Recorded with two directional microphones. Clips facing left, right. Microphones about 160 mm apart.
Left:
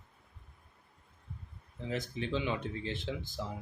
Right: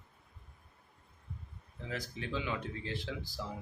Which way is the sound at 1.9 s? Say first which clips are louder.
Left 4 dB; 20° left (ahead or behind).